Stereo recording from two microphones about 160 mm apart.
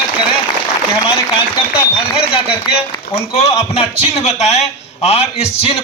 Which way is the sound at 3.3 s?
40° left (ahead or behind).